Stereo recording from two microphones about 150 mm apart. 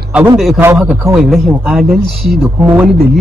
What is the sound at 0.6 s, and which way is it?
A man's voice, 10° right (ahead or behind).